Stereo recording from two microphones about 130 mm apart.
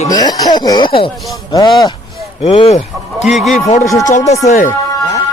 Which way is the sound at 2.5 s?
45° left (ahead or behind).